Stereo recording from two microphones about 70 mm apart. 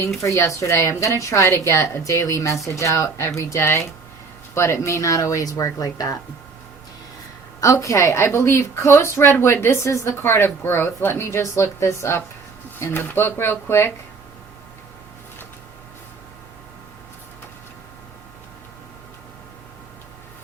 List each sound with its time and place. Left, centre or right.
0.2 s speech: left
7.6 s a woman's voice: left
10.2 s a woman's voice: left